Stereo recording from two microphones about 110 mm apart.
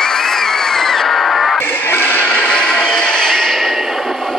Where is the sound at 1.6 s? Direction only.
25° left (ahead or behind).